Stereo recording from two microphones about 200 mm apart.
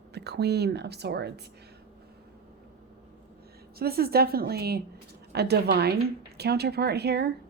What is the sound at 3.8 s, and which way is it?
Speech, 50° right (ahead or behind).